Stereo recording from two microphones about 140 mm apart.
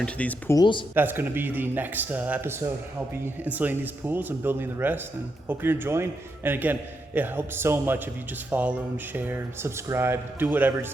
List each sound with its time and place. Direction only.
0.0 s speech: 10° left (ahead or behind)
0.5 s speech: 35° left (ahead or behind)
0.9 s a man's voice: 15° right (ahead or behind)